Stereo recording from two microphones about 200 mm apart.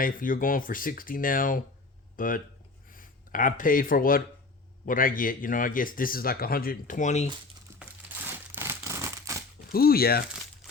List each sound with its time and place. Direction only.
0.0 s speech: 45° left (ahead or behind)
7.8 s crumpling: 10° right (ahead or behind)
9.7 s speech: 50° left (ahead or behind)